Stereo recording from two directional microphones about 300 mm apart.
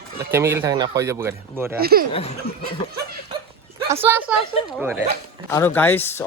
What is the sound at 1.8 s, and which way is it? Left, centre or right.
Speech, right.